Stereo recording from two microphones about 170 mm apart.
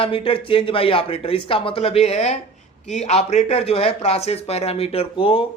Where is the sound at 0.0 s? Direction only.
30° left (ahead or behind).